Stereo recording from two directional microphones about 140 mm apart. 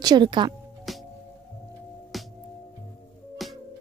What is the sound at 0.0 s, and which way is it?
Speech, 30° right (ahead or behind).